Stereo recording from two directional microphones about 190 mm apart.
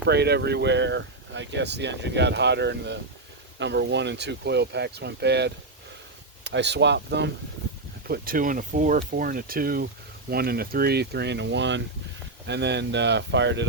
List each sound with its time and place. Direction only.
0.0 s speech: 60° right (ahead or behind)
8.0 s speech: 50° right (ahead or behind); by 13.7 s 70° right (ahead or behind)